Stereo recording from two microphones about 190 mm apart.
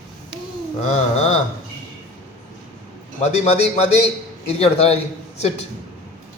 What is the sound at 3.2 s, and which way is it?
A man's voice, 35° left (ahead or behind).